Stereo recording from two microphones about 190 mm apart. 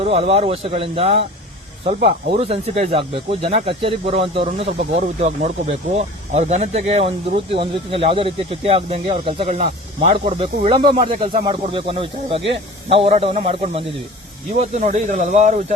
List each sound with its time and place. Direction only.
0.0 s speech: 30° right (ahead or behind)